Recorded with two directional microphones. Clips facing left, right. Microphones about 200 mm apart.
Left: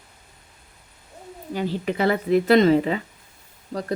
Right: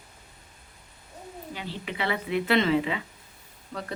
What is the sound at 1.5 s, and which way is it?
Speech, 45° left (ahead or behind).